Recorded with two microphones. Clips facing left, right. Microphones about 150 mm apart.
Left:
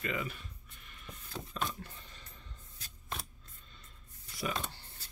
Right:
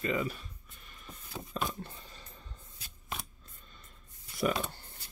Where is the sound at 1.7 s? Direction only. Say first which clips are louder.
Right 3 dB; 30° right (ahead or behind).